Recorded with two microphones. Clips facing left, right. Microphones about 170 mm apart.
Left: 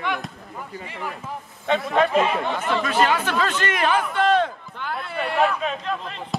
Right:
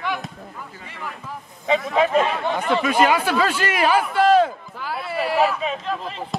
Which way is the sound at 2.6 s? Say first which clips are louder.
Right 4 dB; 10° right (ahead or behind).